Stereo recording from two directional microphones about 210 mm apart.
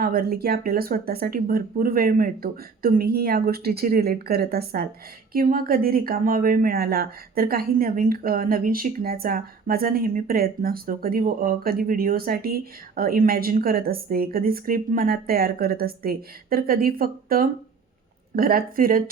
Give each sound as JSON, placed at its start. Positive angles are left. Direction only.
{"t": 0.0, "sound": "speech", "side_deg": -45}